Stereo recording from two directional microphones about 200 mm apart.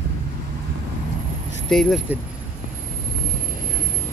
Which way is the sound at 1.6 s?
Centre (ahead or behind).